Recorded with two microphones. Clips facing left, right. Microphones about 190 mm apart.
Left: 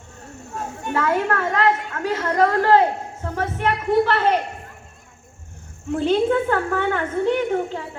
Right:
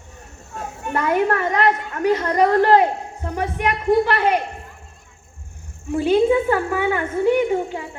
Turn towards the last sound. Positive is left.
turn(degrees=-10)  # may be behind; listen again after turning